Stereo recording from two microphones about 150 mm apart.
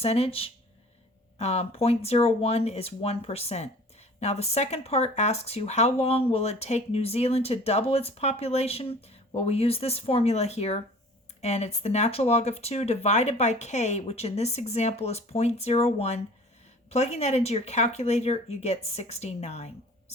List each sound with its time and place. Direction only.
0.0 s speech: 40° left (ahead or behind)